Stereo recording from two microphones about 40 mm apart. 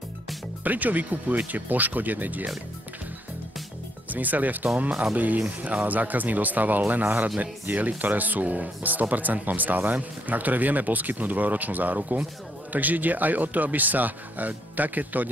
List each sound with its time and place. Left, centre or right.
0.7 s speech: right
4.1 s speech: right